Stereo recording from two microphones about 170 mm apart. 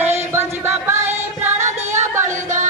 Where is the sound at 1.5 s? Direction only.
45° right (ahead or behind).